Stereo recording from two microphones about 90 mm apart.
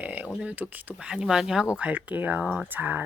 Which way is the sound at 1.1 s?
5° right (ahead or behind).